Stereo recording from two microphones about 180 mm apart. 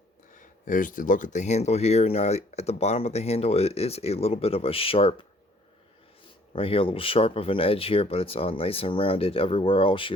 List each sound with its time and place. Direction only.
0.3 s speech: 45° left (ahead or behind); by 5.2 s 30° left (ahead or behind)
6.6 s speech: 30° left (ahead or behind)